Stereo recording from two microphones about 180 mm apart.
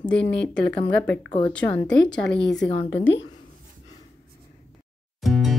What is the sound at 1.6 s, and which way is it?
Speech, 10° left (ahead or behind).